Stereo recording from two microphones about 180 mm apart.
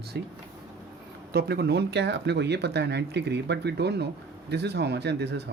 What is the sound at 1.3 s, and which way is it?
Speech, 60° right (ahead or behind).